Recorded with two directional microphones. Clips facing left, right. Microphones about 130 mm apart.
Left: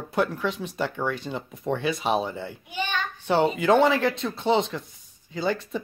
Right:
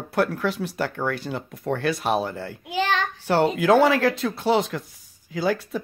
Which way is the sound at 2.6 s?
90° right.